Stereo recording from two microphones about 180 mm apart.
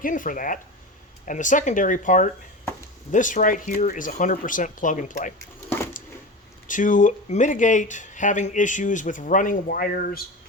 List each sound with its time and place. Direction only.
0.0 s speech: 50° left (ahead or behind)
5.5 s a sound: 15° left (ahead or behind)
6.7 s speech: 45° left (ahead or behind)